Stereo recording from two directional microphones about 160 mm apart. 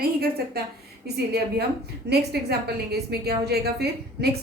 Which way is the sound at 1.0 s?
90° right.